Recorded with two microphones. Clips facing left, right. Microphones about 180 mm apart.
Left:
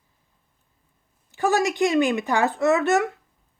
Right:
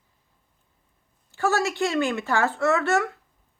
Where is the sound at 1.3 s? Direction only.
15° left (ahead or behind).